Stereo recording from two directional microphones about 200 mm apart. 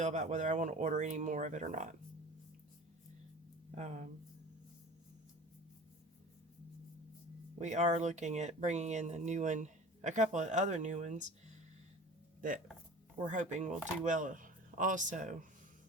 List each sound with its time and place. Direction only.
0.0 s speech: 35° right (ahead or behind)
3.8 s speech: 35° right (ahead or behind)
7.6 s speech: 35° right (ahead or behind)
12.4 s speech: 45° right (ahead or behind)